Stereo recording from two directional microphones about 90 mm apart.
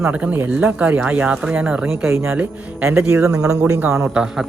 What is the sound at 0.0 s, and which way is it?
Speech, 15° right (ahead or behind).